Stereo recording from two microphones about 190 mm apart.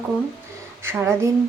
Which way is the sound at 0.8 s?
15° right (ahead or behind).